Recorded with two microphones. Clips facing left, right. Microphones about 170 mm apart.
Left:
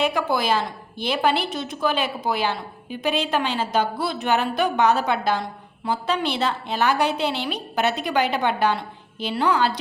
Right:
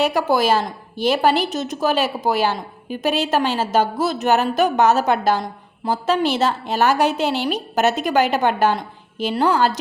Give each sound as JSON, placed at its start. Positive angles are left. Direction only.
{"t": 0.0, "sound": "a woman's voice", "side_deg": -45}